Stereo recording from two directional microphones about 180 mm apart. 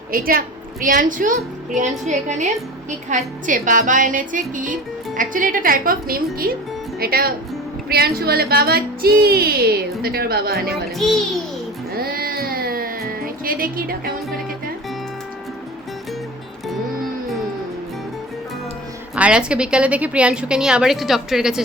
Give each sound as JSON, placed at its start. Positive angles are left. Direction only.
{"t": 0.1, "sound": "a woman's voice", "side_deg": -55}
{"t": 10.9, "sound": "a woman's voice", "side_deg": 0}
{"t": 11.9, "sound": "music", "side_deg": -55}
{"t": 19.1, "sound": "a woman's voice", "side_deg": -5}